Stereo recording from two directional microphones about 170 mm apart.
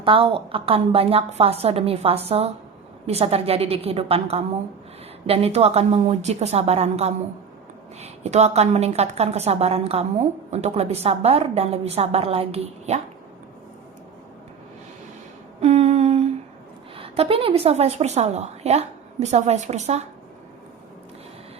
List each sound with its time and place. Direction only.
0.0 s a woman's voice: 30° right (ahead or behind)
15.6 s humming: 40° right (ahead or behind)
17.0 s a woman's voice: 35° right (ahead or behind)